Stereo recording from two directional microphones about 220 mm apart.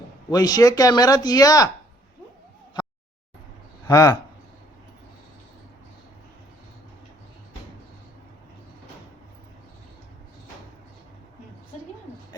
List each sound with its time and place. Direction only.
0.3 s speech: 15° left (ahead or behind)
3.8 s speech: 15° left (ahead or behind)